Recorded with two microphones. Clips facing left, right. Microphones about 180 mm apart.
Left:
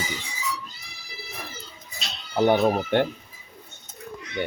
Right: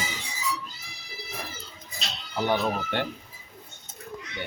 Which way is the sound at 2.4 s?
50° left (ahead or behind).